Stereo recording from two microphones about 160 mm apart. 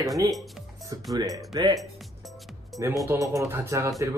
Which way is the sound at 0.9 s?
25° right (ahead or behind).